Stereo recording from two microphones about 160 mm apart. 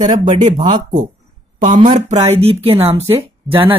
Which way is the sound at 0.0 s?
50° right (ahead or behind).